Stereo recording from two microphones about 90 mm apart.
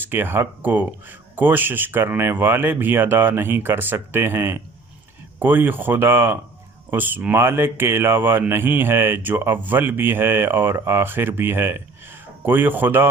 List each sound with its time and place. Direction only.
0.0 s speech: 25° right (ahead or behind)